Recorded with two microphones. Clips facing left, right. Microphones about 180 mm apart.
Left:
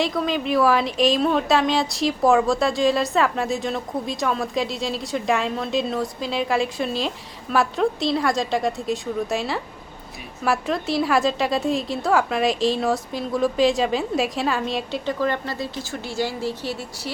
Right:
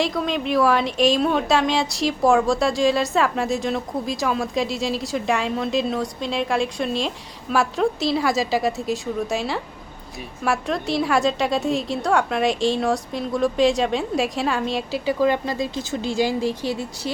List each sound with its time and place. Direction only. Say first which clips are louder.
0.0 s speech: even; centre (ahead or behind)
15.2 s speech: right 6 dB; 15° right (ahead or behind)